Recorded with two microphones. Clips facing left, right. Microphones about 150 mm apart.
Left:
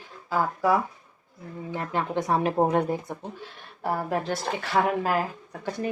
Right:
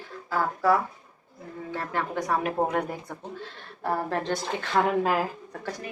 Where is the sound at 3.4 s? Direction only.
10° left (ahead or behind).